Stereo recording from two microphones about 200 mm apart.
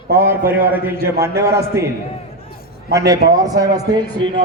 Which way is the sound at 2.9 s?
15° right (ahead or behind).